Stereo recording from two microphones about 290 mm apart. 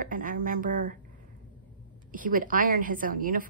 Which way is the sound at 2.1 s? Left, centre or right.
Right.